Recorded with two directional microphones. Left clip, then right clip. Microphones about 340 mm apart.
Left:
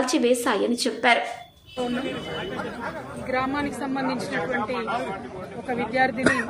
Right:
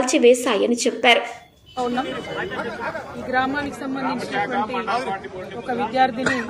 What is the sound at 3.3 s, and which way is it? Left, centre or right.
Speech, centre.